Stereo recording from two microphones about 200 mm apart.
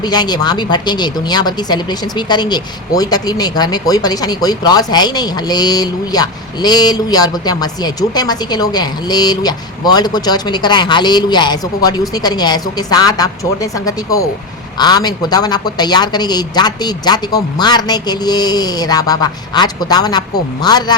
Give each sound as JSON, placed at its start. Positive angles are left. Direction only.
{"t": 0.0, "sound": "speech", "side_deg": 20}